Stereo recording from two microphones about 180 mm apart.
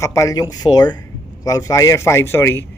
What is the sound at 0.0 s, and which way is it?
A man's voice, 15° left (ahead or behind).